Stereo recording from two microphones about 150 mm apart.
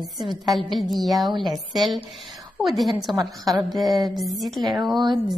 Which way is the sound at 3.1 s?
25° right (ahead or behind).